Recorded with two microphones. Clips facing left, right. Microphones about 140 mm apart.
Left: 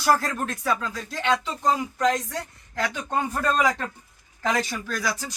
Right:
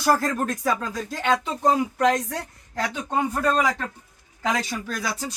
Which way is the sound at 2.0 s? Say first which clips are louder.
Right 2 dB; 60° right (ahead or behind).